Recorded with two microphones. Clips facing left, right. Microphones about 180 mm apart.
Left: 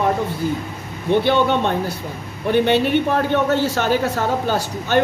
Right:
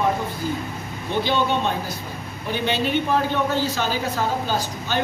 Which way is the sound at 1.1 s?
60° left (ahead or behind).